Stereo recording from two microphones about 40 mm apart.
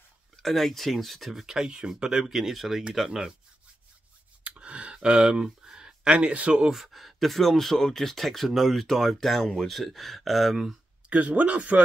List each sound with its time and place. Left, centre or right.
0.4 s speech: centre
1.4 s speech: centre
2.2 s speech: centre
4.4 s a sound: right
6.0 s speech: right
6.7 s speech: centre
11.1 s speech: right